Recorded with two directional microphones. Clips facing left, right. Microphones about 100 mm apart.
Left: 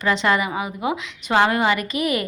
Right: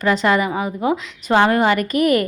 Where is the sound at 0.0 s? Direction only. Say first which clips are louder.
Right 3 dB; 40° right (ahead or behind).